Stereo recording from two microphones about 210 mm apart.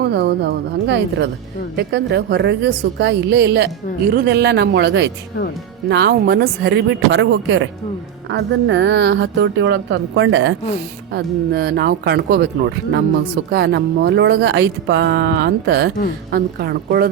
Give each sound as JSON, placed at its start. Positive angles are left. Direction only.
{"t": 0.0, "sound": "a woman's voice", "side_deg": -50}
{"t": 11.1, "sound": "a woman's voice", "side_deg": -50}